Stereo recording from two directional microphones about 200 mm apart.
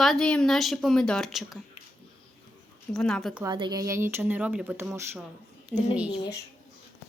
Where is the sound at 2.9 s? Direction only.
Centre (ahead or behind).